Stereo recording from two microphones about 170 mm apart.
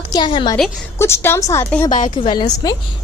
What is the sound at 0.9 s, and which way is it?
Speech, 15° left (ahead or behind).